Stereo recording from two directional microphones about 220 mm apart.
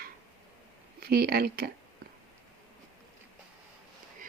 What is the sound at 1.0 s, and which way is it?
Speech, 45° right (ahead or behind).